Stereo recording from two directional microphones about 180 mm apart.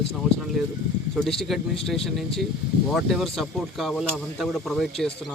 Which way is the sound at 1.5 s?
Centre (ahead or behind).